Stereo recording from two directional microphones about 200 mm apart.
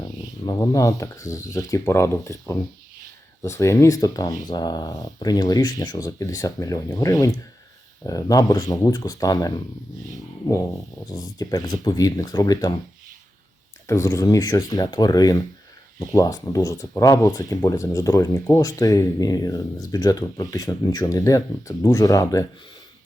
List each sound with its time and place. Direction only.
0.0 s speech: 20° left (ahead or behind)
11.1 s speech: 20° left (ahead or behind)
13.8 s speech: 15° left (ahead or behind)